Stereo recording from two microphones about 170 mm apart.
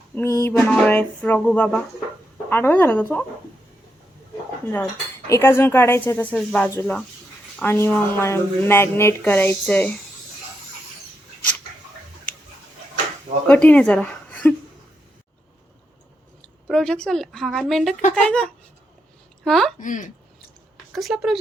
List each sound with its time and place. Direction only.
0.2 s speech: 15° left (ahead or behind)
5.3 s speech: 15° left (ahead or behind)
13.5 s speech: 10° left (ahead or behind)
16.6 s a woman's voice: 5° left (ahead or behind)
19.8 s speech: 50° left (ahead or behind)
20.9 s a woman's voice: centre (ahead or behind)